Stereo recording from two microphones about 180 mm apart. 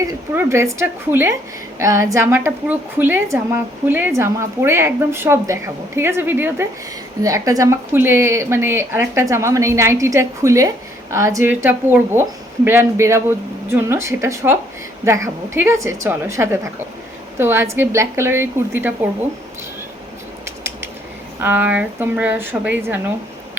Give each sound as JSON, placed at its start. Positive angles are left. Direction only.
{"t": 0.0, "sound": "a woman's voice", "side_deg": -15}
{"t": 21.4, "sound": "a woman's voice", "side_deg": -10}